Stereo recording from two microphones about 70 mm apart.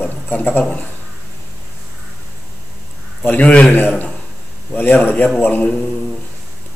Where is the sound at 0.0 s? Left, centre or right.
Left.